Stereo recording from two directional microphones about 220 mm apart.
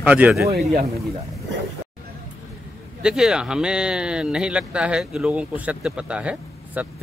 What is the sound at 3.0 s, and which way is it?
Speech, 5° right (ahead or behind).